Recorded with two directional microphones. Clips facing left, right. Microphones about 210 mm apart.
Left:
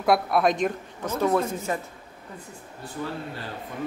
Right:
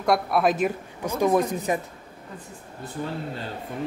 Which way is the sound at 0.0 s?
Centre (ahead or behind).